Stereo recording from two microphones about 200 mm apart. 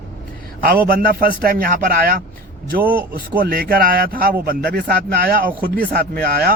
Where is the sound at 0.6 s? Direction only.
45° right (ahead or behind).